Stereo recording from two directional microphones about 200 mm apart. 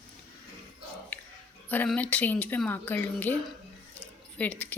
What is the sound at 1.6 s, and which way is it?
Speech, 10° left (ahead or behind).